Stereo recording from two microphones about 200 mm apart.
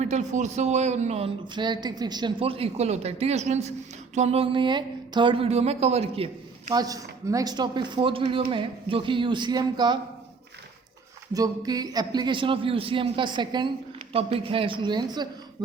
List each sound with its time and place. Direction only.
0.0 s speech: 35° right (ahead or behind)
11.3 s speech: 20° right (ahead or behind)